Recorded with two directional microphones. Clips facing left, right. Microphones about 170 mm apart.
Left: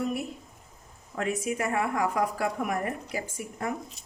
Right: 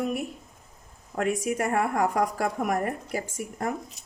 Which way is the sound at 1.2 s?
45° right (ahead or behind).